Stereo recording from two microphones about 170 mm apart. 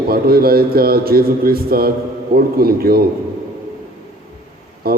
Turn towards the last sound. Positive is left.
turn(degrees=-65)  # may be behind; listen again after turning